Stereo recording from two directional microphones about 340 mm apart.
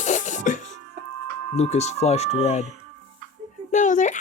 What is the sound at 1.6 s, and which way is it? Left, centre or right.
Speech, centre.